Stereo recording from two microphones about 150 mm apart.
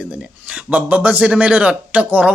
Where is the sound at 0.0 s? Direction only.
10° right (ahead or behind).